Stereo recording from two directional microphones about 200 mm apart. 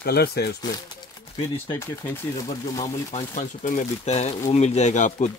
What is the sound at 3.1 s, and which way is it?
Speech, 35° left (ahead or behind).